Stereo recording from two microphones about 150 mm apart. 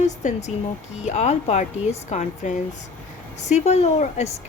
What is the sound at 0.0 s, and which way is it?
A woman's voice, 50° left (ahead or behind).